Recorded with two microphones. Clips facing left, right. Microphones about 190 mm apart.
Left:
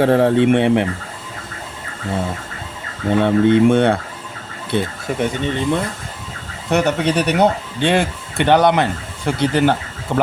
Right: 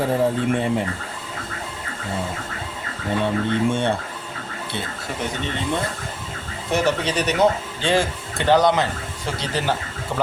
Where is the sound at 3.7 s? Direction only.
90° left.